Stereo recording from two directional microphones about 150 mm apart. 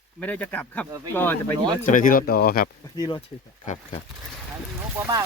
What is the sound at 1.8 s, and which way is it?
Speech, 65° left (ahead or behind).